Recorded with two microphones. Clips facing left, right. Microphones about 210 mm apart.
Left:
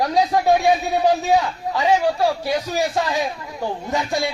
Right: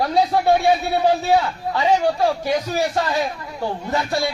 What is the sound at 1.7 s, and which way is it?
A man's voice, 10° left (ahead or behind).